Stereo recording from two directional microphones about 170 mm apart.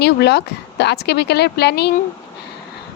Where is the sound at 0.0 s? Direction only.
80° left.